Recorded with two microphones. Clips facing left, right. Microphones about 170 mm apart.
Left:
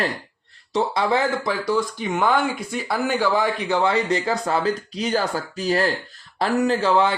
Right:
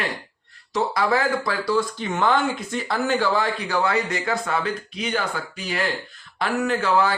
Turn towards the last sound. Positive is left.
turn(degrees=25)  # may be behind; listen again after turning